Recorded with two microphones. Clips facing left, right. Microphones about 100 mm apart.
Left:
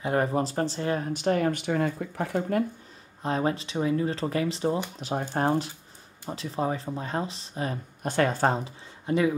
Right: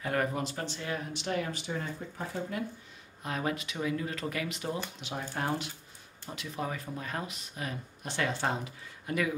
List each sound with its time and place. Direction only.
0.0 s speech: 25° left (ahead or behind); by 2.6 s 65° left (ahead or behind)
3.2 s speech: 30° left (ahead or behind)
8.0 s speech: 45° left (ahead or behind)
8.6 s speech: 25° left (ahead or behind)